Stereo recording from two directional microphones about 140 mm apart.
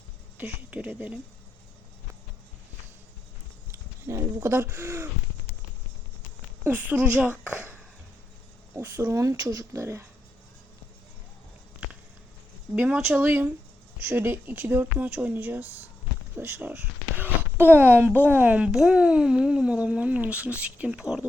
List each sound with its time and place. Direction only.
0.3 s speech: 10° right (ahead or behind)
3.7 s speech: 20° right (ahead or behind)
6.7 s speech: 10° right (ahead or behind)
12.7 s speech: 10° right (ahead or behind)